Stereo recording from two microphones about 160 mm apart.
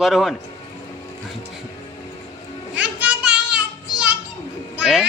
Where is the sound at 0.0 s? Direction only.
Centre (ahead or behind).